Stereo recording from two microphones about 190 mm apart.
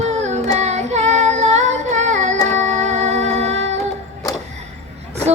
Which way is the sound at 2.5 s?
40° right (ahead or behind).